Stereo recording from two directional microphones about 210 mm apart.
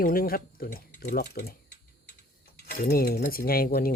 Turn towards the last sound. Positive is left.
turn(degrees=45)  # may be behind; listen again after turning